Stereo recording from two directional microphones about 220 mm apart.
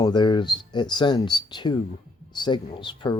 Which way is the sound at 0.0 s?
20° left (ahead or behind).